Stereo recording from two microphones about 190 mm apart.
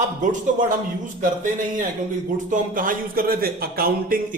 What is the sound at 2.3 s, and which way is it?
Speech, 45° right (ahead or behind).